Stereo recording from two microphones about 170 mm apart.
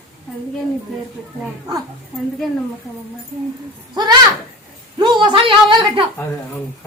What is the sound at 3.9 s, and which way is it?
A child's voice, 25° right (ahead or behind).